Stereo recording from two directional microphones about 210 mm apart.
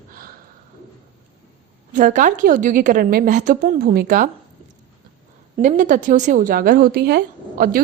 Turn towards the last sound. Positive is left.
turn(degrees=-45)  # may be behind; listen again after turning